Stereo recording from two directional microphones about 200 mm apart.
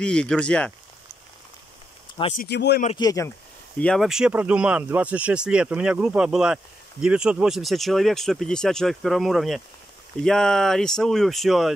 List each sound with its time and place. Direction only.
0.0 s speech: 5° left (ahead or behind)
2.3 s speech: 55° left (ahead or behind)
3.0 s speech: 15° left (ahead or behind)
3.8 s speech: centre (ahead or behind)